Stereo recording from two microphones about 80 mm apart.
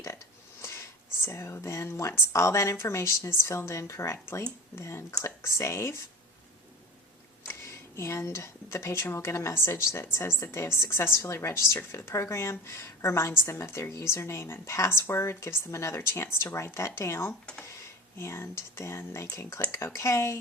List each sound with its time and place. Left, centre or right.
0.6 s a woman's voice: left
7.9 s a woman's voice: left